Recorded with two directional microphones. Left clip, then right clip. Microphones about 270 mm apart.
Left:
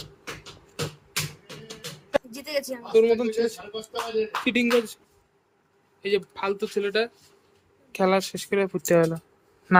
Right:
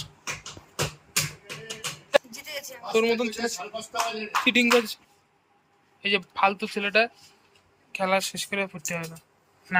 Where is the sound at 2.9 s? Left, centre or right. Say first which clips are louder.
Left 4 dB; centre.